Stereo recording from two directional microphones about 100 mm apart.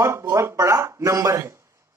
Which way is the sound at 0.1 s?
30° right (ahead or behind).